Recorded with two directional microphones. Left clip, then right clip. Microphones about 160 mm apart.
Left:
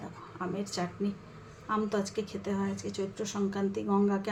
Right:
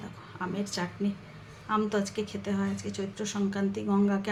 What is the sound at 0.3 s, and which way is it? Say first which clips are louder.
A woman's voice: right 1 dB; 10° left (ahead or behind).